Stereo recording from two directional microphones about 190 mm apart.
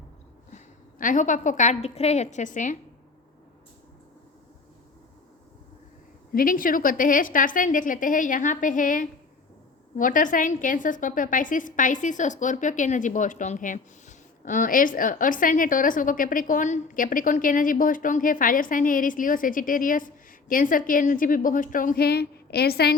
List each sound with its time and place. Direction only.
0.5 s a woman's voice: 45° left (ahead or behind)
6.3 s a woman's voice: 45° left (ahead or behind)